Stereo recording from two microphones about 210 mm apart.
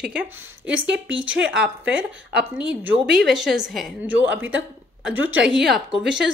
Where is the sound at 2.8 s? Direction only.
Centre (ahead or behind).